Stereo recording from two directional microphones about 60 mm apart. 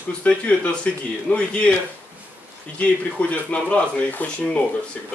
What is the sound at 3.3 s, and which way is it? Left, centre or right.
Speech, left.